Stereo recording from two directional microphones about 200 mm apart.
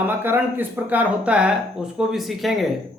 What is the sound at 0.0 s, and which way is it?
Speech, 10° right (ahead or behind).